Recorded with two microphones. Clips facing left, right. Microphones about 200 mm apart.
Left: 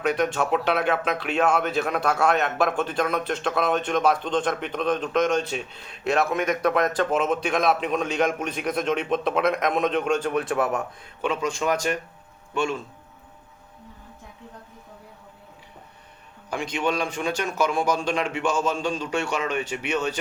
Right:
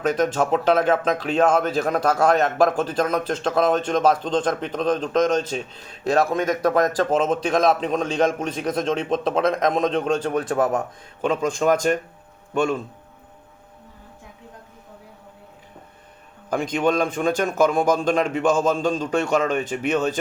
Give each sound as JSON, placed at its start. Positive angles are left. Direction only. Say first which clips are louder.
{"t": 0.0, "sound": "speech", "louder": "right 3 dB", "side_deg": -40}
{"t": 16.5, "sound": "speech", "louder": "right 5 dB", "side_deg": -45}